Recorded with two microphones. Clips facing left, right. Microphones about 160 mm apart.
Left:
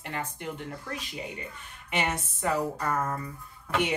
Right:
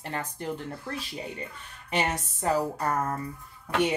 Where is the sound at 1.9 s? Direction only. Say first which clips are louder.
Right 2 dB; 35° right (ahead or behind).